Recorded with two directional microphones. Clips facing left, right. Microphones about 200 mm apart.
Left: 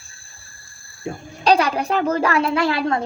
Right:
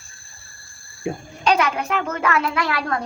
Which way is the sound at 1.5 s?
35° left (ahead or behind).